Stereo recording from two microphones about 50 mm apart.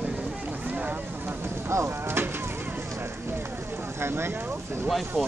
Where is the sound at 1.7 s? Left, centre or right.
Right.